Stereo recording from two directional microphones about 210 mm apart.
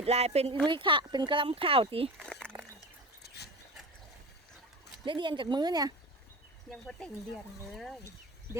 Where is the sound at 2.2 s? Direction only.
5° left (ahead or behind).